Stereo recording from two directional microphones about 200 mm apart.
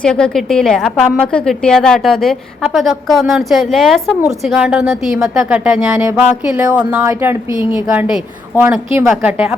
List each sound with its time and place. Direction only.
0.0 s speech: 5° left (ahead or behind)